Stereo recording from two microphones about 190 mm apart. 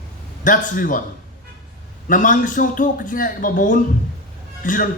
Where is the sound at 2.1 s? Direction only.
45° left (ahead or behind).